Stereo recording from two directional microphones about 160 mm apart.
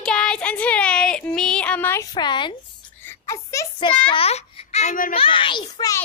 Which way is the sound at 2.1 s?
30° left (ahead or behind).